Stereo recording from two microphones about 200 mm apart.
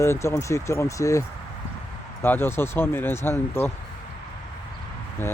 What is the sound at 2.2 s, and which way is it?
Speech, 10° left (ahead or behind).